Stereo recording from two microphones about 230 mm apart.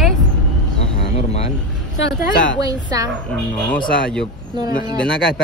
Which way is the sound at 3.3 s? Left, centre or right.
Centre.